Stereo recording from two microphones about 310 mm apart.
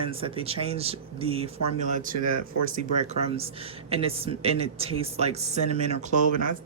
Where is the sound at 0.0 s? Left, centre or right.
Centre.